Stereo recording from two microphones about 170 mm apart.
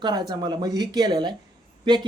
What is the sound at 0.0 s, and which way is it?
Speech, 25° right (ahead or behind).